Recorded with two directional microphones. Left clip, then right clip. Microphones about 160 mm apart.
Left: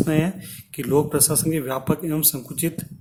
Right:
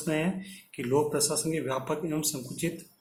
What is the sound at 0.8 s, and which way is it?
Speech, 80° left.